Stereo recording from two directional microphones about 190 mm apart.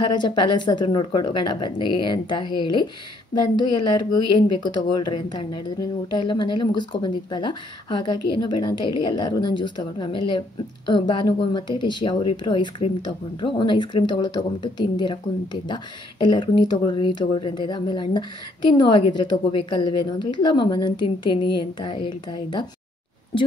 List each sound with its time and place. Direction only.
0.0 s a woman's voice: 20° left (ahead or behind)